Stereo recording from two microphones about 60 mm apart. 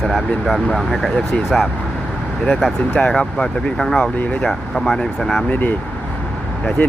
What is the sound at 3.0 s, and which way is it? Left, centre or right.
Speech, centre.